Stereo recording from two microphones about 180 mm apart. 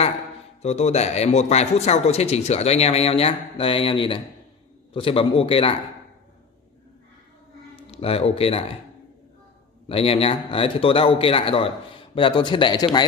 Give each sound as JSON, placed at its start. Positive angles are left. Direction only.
{"t": 0.6, "sound": "speech", "side_deg": 35}
{"t": 7.8, "sound": "speech", "side_deg": 35}
{"t": 9.8, "sound": "speech", "side_deg": 30}